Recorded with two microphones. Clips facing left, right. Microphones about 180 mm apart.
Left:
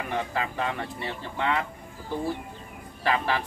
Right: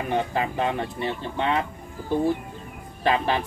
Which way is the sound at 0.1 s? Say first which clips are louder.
Right 5 dB; 25° right (ahead or behind).